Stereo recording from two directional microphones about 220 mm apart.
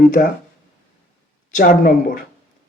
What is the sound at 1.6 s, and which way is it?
Speech, 35° left (ahead or behind).